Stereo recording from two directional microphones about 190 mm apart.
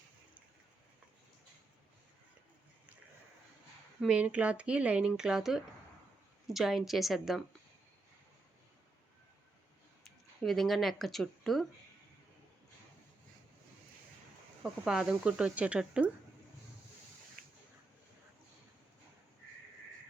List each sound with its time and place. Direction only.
4.0 s speech: 5° right (ahead or behind)
10.0 s speech: centre (ahead or behind)
14.6 s speech: 5° right (ahead or behind)
17.4 s a sound: 50° right (ahead or behind)